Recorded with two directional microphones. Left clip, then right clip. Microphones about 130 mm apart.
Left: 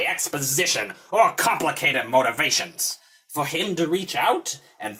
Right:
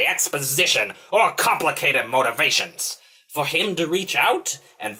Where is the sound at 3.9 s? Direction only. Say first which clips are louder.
Right 3 dB; 50° left (ahead or behind).